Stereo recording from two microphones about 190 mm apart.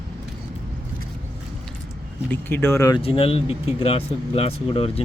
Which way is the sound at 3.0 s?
30° left (ahead or behind).